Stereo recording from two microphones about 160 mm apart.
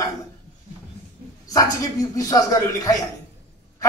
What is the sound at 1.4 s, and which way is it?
A man's voice, 20° left (ahead or behind).